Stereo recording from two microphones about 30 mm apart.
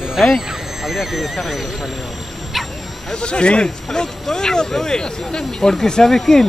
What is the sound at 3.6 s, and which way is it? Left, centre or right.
Speech, left.